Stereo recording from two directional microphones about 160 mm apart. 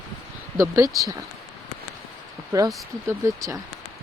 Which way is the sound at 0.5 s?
20° right (ahead or behind).